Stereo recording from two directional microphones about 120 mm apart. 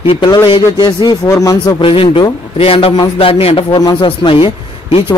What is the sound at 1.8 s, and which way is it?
A man's voice, 50° left (ahead or behind).